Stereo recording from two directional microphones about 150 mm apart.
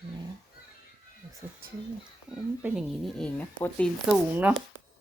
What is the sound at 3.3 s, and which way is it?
Speech, 10° left (ahead or behind).